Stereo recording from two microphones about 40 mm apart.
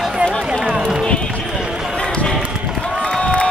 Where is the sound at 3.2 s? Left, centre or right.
Left.